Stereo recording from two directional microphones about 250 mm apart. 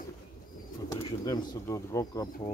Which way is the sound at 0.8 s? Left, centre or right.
Centre.